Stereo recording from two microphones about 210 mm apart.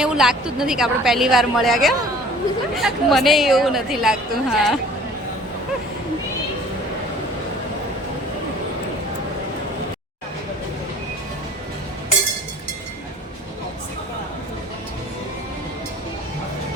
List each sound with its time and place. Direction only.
0.0 s a woman's voice: 5° right (ahead or behind)